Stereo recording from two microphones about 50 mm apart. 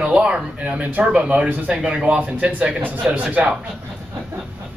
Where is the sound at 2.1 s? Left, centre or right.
Right.